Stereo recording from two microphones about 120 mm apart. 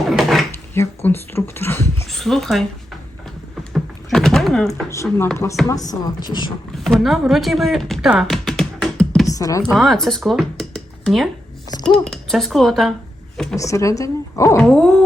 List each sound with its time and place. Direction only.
0.1 s drawer open or close: centre (ahead or behind)
0.7 s speech: 20° left (ahead or behind)
2.0 s speech: centre (ahead or behind)
3.6 s a sound: 5° left (ahead or behind)
4.7 s a woman's voice: 25° left (ahead or behind)
6.7 s speech: centre (ahead or behind)
8.1 s music: centre (ahead or behind)
9.2 s speech: 30° left (ahead or behind)
9.7 s speech: centre (ahead or behind)
13.6 s a woman's voice: 25° left (ahead or behind)
14.6 s dog: 5° left (ahead or behind)